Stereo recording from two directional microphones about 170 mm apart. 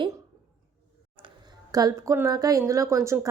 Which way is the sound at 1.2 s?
25° right (ahead or behind).